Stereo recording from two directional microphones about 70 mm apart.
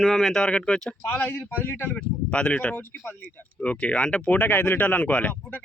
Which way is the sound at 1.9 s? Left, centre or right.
Centre.